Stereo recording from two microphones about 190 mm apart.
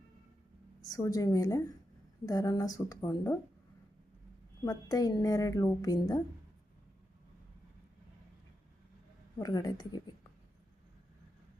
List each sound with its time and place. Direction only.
0.9 s a woman's voice: 20° left (ahead or behind)
4.6 s a woman's voice: 20° left (ahead or behind)
9.4 s a woman's voice: 20° left (ahead or behind)